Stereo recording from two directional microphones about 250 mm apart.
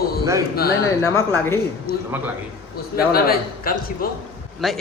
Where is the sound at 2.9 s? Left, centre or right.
Left.